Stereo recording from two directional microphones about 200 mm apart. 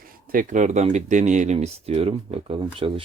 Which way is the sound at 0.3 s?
40° right (ahead or behind).